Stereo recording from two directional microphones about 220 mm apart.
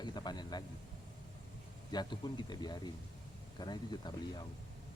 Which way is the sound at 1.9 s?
20° left (ahead or behind).